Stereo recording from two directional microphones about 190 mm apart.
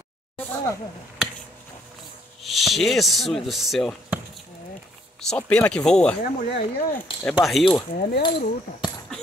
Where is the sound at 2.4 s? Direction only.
Centre (ahead or behind).